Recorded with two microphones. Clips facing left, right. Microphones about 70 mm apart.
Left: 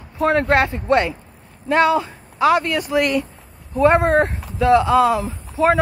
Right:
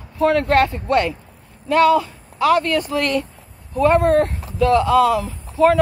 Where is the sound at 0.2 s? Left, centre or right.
Left.